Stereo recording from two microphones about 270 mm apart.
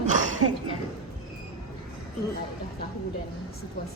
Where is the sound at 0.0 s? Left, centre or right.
Right.